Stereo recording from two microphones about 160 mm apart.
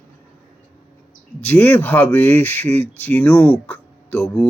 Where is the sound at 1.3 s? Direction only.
10° left (ahead or behind).